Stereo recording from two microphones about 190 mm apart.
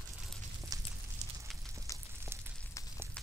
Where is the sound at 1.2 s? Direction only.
35° right (ahead or behind).